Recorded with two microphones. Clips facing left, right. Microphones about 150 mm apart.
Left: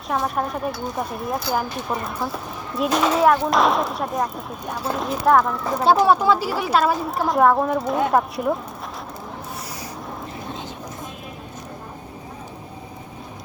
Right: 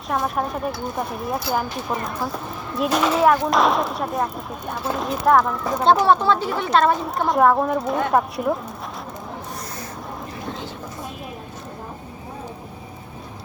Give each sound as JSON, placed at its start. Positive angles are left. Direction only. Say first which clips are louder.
{"t": 0.1, "sound": "speech", "louder": "even", "side_deg": 0}